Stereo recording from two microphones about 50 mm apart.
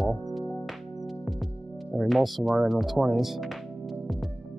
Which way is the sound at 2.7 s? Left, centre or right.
Centre.